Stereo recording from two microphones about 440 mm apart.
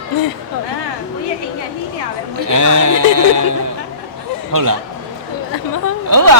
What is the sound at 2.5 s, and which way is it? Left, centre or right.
A man's voice, right.